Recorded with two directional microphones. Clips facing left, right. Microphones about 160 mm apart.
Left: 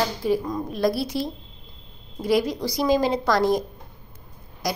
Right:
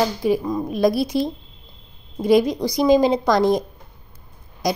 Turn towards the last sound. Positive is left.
turn(degrees=-20)  # may be behind; listen again after turning